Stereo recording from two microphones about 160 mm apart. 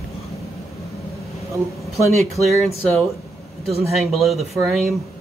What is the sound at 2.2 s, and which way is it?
Speech, centre (ahead or behind).